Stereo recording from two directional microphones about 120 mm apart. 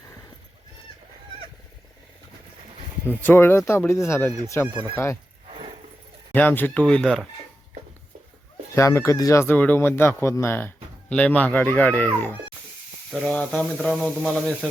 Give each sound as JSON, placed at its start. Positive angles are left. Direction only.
{"t": 3.2, "sound": "a man's voice", "side_deg": 20}
{"t": 4.7, "sound": "speech", "side_deg": -40}
{"t": 5.5, "sound": "a sound", "side_deg": -45}
{"t": 6.3, "sound": "speech", "side_deg": 15}
{"t": 8.7, "sound": "a man's voice", "side_deg": 25}
{"t": 13.9, "sound": "speech", "side_deg": 0}
{"t": 14.3, "sound": "speech", "side_deg": 10}